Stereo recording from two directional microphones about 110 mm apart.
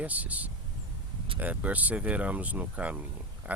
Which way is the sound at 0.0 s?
15° right (ahead or behind).